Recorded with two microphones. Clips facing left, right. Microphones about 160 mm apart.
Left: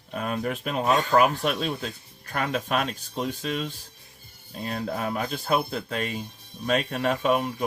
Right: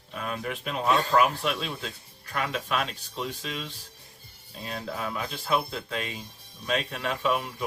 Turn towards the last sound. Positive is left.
turn(degrees=50)  # may be behind; listen again after turning